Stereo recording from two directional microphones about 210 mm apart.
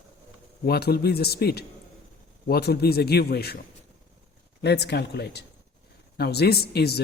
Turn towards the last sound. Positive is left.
turn(degrees=50)  # may be behind; listen again after turning